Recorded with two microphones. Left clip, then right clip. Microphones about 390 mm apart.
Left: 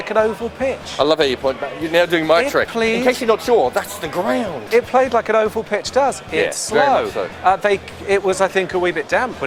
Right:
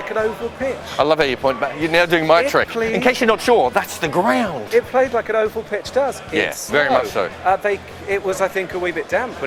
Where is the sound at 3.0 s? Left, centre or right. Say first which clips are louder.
Right 1 dB; right.